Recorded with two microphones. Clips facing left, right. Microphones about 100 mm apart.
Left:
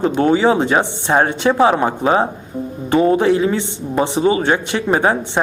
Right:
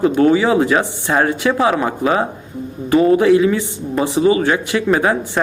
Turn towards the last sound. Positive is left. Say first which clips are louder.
# even
turn(degrees=30)  # may be behind; listen again after turning